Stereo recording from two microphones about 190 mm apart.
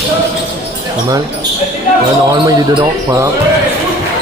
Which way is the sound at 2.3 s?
20° right (ahead or behind).